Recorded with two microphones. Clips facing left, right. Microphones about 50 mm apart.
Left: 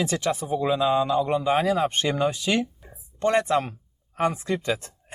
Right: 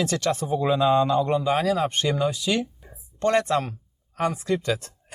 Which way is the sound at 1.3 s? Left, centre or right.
Centre.